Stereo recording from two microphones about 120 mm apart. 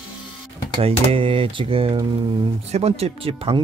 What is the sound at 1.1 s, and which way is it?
Speech, 45° right (ahead or behind).